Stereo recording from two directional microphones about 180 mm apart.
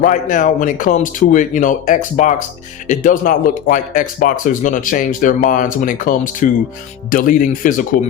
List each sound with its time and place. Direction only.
0.0 s speech: 45° left (ahead or behind)